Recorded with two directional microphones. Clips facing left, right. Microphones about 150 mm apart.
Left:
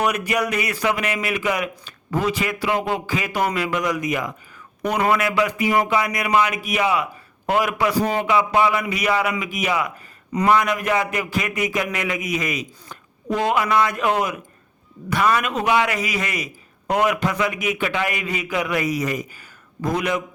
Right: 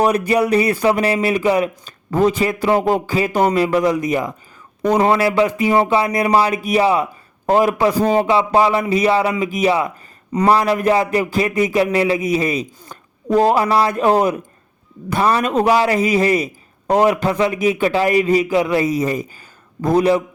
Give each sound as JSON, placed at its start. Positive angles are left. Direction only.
{"t": 0.0, "sound": "speech", "side_deg": -30}